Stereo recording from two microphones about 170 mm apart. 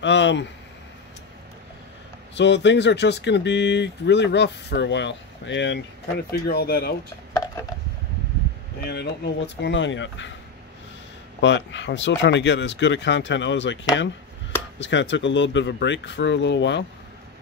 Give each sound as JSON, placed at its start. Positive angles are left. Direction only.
{"t": 0.0, "sound": "speech", "side_deg": 90}
{"t": 2.3, "sound": "speech", "side_deg": 90}
{"t": 6.3, "sound": "speech", "side_deg": 65}
{"t": 8.8, "sound": "speech", "side_deg": 80}
{"t": 11.4, "sound": "speech", "side_deg": 90}
{"t": 14.8, "sound": "speech", "side_deg": 90}